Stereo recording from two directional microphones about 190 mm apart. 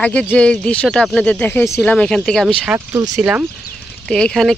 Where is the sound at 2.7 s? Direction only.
15° right (ahead or behind).